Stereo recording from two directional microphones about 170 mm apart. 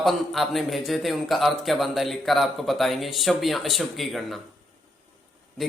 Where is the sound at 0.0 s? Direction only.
Centre (ahead or behind).